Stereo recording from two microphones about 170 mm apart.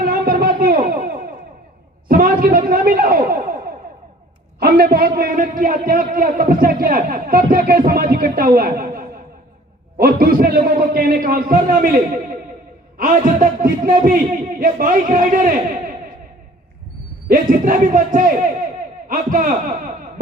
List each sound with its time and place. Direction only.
0.0 s a sound: 55° right (ahead or behind)
4.6 s a man's voice: 60° right (ahead or behind)
17.2 s a man's voice: 55° right (ahead or behind)